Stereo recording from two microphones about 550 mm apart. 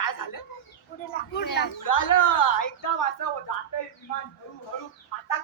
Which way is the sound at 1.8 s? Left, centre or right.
Left.